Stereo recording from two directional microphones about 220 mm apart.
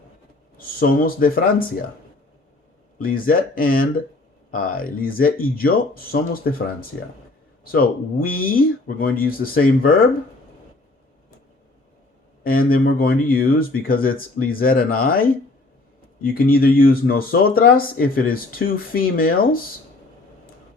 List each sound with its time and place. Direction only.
0.5 s speech: 40° left (ahead or behind)
3.0 s speech: 40° left (ahead or behind)
12.4 s speech: 40° left (ahead or behind)
16.3 s speech: 40° left (ahead or behind)